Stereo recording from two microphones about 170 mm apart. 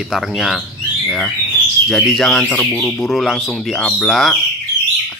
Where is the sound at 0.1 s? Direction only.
Centre (ahead or behind).